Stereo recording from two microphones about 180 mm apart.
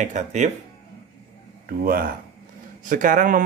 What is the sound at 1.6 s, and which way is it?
A man's voice, 55° right (ahead or behind).